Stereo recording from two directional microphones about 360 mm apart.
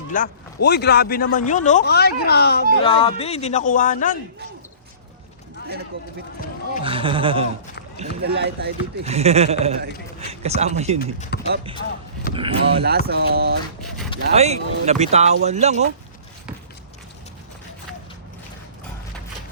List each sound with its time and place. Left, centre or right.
0.1 s a man's voice: left
2.8 s a man's voice: centre
6.8 s speech: centre
11.0 s a man's voice: left
12.3 s speech: centre
13.1 s speech: right